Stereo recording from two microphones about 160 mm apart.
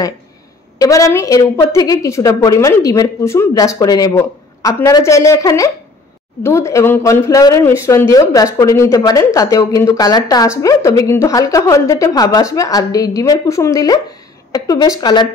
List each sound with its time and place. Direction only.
0.7 s speech: 20° left (ahead or behind)